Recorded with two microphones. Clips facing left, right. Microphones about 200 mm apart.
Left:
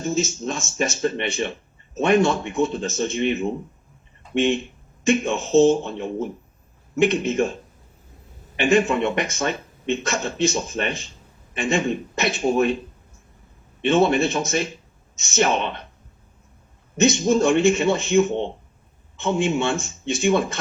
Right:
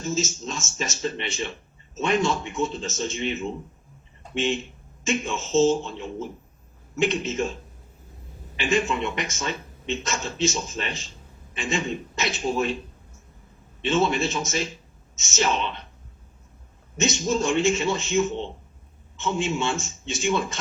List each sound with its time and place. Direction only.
0.0 s speech: 60° left (ahead or behind)
13.8 s speech: 55° left (ahead or behind)
17.0 s speech: 60° left (ahead or behind)